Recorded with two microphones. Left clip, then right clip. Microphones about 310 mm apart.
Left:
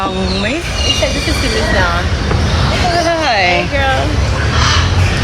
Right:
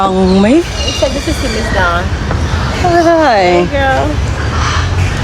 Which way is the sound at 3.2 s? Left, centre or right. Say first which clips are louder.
Right 3 dB; centre.